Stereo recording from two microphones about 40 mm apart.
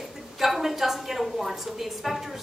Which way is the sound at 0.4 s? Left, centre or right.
Centre.